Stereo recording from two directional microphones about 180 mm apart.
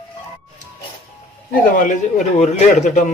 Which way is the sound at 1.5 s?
50° left (ahead or behind).